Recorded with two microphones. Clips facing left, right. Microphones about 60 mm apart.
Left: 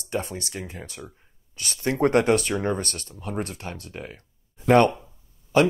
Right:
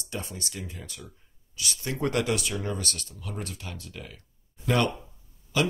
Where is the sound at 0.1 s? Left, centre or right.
Left.